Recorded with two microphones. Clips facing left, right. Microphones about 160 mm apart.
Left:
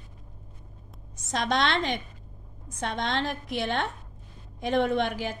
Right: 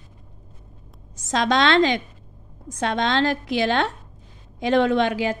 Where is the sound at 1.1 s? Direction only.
90° right.